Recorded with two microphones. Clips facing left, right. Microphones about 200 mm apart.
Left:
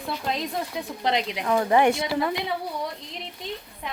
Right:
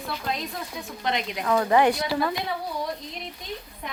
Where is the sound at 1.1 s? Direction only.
25° left (ahead or behind).